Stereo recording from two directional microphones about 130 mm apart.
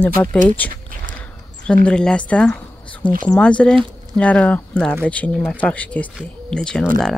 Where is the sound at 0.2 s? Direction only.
15° left (ahead or behind).